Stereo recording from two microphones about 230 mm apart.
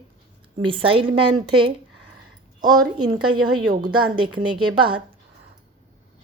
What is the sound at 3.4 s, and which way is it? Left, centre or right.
Speech, right.